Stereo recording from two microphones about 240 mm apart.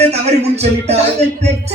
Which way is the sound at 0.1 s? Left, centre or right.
Right.